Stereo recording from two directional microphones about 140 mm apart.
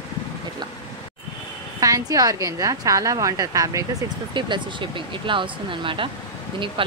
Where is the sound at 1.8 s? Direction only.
25° right (ahead or behind).